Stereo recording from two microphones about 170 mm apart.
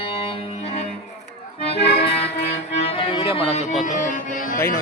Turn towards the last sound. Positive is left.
turn(degrees=50)  # may be behind; listen again after turning